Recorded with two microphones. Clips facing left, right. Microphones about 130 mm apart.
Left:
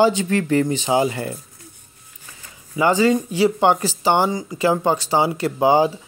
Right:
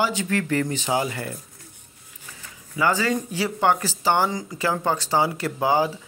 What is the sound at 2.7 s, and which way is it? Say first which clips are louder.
Speech: left 6 dB; 20° left (ahead or behind).